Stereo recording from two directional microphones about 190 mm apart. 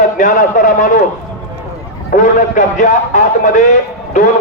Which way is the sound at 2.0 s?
40° left (ahead or behind).